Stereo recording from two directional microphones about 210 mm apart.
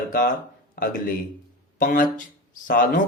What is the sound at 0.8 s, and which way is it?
Speech, 45° left (ahead or behind).